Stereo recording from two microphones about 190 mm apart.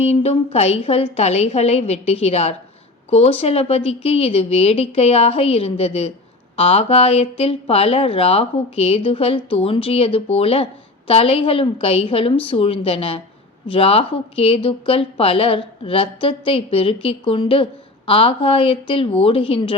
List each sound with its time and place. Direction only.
0.0 s speech: 35° left (ahead or behind)